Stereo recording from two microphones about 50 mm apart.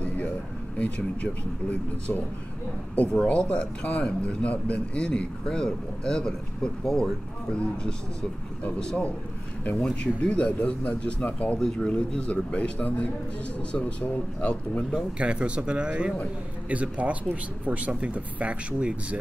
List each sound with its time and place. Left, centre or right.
0.7 s speech: left
3.2 s speech: left
11.6 s speech: centre
15.1 s speech: right